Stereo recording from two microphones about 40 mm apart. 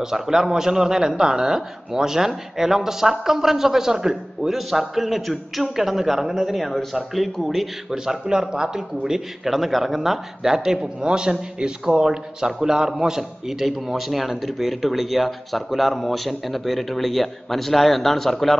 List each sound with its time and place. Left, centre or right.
0.0 s a man's voice: centre
7.9 s a man's voice: centre
9.5 s a man's voice: centre